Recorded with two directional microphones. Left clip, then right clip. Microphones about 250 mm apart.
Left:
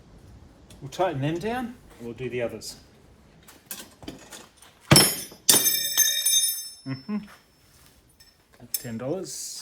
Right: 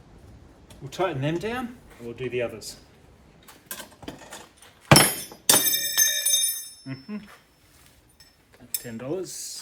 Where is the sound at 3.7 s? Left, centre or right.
Centre.